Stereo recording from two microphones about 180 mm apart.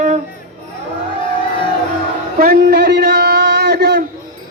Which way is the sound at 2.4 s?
60° right (ahead or behind).